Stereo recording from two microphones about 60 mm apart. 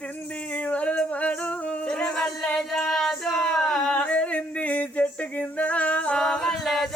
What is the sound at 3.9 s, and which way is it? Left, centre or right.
Singing, left.